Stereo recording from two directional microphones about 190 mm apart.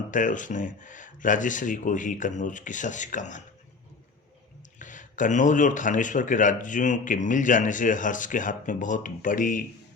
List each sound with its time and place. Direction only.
0.1 s speech: 40° left (ahead or behind)
4.8 s speech: 40° left (ahead or behind)